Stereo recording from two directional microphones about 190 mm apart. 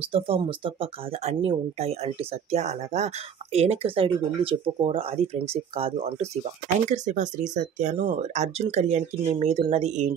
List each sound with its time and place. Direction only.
0.1 s speech: 30° right (ahead or behind)